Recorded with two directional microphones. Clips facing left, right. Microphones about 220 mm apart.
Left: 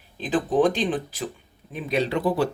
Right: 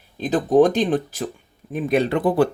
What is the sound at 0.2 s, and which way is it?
Speech, 40° right (ahead or behind).